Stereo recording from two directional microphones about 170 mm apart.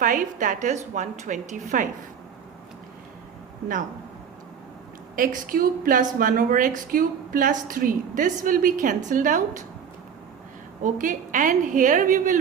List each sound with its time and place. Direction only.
0.0 s a woman's voice: 50° right (ahead or behind)
5.1 s a woman's voice: 55° right (ahead or behind)
10.8 s a woman's voice: 50° right (ahead or behind)